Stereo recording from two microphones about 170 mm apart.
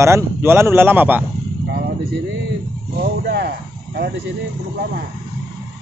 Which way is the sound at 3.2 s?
70° right (ahead or behind).